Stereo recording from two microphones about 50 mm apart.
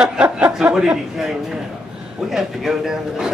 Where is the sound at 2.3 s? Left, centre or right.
Centre.